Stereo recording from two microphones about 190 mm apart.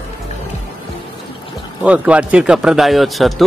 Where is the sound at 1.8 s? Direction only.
5° right (ahead or behind).